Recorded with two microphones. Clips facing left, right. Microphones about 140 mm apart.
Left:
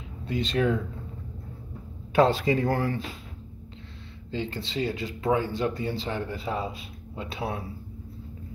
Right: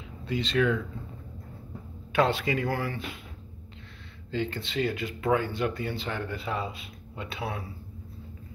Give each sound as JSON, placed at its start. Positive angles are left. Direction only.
{"t": 0.3, "sound": "speech", "side_deg": 45}
{"t": 2.1, "sound": "a man's voice", "side_deg": 30}
{"t": 4.3, "sound": "speech", "side_deg": 25}
{"t": 7.3, "sound": "a man's voice", "side_deg": 25}